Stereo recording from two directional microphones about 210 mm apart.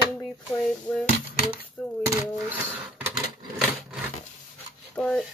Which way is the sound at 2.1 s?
15° right (ahead or behind).